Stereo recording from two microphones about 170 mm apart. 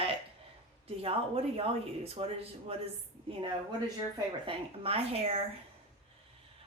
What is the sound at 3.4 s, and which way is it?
A woman's voice, 25° right (ahead or behind).